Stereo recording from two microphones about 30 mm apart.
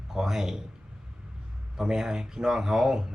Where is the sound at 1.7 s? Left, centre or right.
Centre.